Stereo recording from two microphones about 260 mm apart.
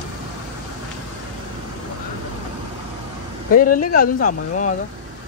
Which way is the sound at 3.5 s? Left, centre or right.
Left.